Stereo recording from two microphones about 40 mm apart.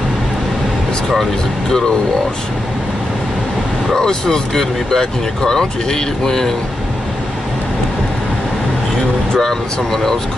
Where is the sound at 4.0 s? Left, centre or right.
Centre.